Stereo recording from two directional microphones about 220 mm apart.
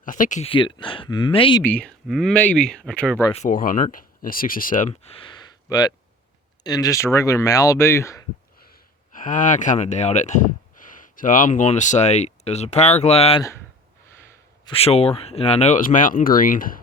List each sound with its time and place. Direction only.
0.0 s speech: 35° left (ahead or behind)
1.6 s speech: 5° left (ahead or behind)
3.3 s speech: 35° left (ahead or behind); by 8.2 s 10° left (ahead or behind)
8.5 s speech: 40° left (ahead or behind)
14.6 s speech: 25° left (ahead or behind)